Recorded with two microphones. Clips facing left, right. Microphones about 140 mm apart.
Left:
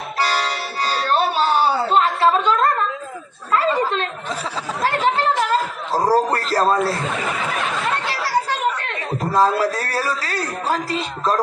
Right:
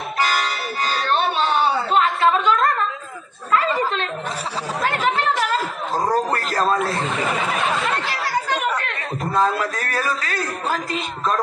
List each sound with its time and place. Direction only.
0.2 s music: 35° left (ahead or behind)
5.9 s a sound: 30° left (ahead or behind)
8.8 s a man's voice: 35° left (ahead or behind)